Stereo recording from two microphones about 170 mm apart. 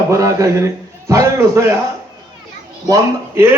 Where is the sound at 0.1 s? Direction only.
20° right (ahead or behind).